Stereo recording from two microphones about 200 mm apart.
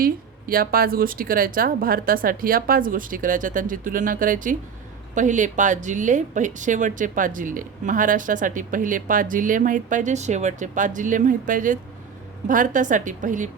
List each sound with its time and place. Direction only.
0.0 s speech: 45° right (ahead or behind)